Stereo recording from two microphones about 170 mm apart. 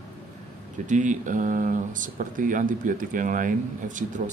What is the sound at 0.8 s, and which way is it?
Speech, 45° right (ahead or behind).